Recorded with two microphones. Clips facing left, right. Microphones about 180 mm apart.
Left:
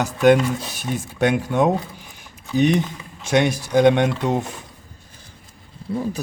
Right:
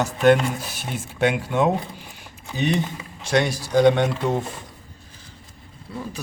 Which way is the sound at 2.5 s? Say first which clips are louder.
Left 5 dB; 15° left (ahead or behind).